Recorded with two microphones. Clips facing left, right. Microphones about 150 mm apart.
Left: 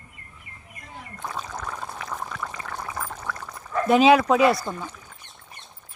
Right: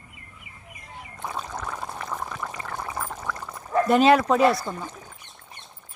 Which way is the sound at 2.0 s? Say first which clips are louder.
Right 1 dB; 5° right (ahead or behind).